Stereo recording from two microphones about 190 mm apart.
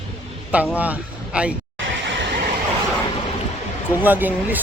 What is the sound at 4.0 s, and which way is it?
Speech, 10° right (ahead or behind).